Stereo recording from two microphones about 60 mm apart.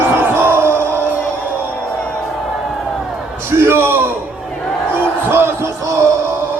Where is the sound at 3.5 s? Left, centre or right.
Right.